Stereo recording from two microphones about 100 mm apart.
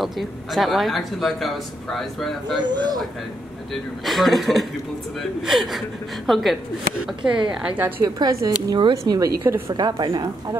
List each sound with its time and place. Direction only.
0.0 s a man's voice: centre (ahead or behind)
2.6 s a woman's voice: 45° right (ahead or behind)
4.0 s a man's voice: centre (ahead or behind); by 7.9 s 15° right (ahead or behind)
8.0 s a woman's voice: 35° right (ahead or behind)
8.6 s a woman's voice: 50° right (ahead or behind)
8.9 s a woman's voice: 40° right (ahead or behind)
9.4 s a woman's voice: 25° right (ahead or behind)
9.8 s a woman's voice: 45° right (ahead or behind)